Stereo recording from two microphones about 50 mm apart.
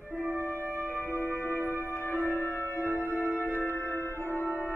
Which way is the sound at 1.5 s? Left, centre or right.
Right.